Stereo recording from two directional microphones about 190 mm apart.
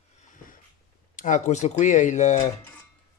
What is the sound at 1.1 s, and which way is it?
Speech, 40° left (ahead or behind).